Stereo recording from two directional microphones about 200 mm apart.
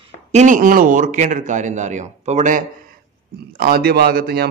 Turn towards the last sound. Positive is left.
turn(degrees=-50)  # may be behind; listen again after turning